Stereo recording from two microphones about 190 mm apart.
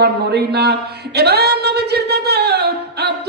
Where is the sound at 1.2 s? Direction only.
60° right (ahead or behind).